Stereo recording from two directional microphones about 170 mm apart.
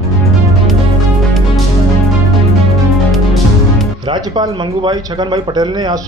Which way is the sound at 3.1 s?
Centre (ahead or behind).